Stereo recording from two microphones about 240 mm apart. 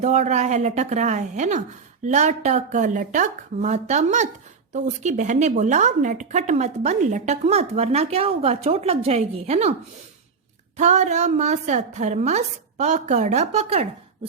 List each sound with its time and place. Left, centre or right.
0.0 s speech: right
10.8 s speech: right